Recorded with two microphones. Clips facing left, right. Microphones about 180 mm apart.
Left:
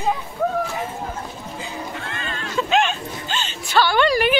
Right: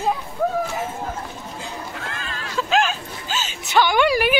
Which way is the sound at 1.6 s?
Centre (ahead or behind).